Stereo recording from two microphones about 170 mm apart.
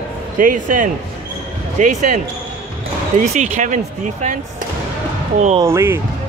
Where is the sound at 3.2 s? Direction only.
45° right (ahead or behind).